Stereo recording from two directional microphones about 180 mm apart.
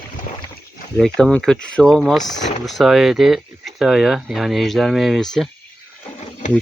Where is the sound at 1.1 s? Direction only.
5° left (ahead or behind).